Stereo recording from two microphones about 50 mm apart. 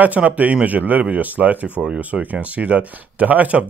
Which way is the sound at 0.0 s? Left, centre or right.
Right.